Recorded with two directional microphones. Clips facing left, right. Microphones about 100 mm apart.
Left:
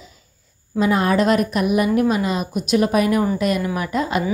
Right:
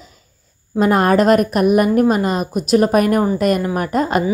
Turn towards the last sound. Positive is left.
turn(degrees=-45)  # may be behind; listen again after turning